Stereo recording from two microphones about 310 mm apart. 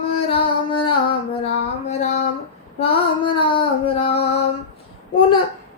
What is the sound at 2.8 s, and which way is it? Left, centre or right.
Female singing, centre.